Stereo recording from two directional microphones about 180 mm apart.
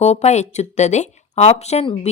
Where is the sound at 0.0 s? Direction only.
35° left (ahead or behind).